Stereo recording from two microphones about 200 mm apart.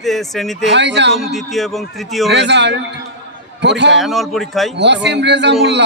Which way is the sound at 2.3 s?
60° right (ahead or behind).